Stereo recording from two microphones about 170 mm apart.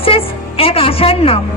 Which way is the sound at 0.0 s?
35° left (ahead or behind).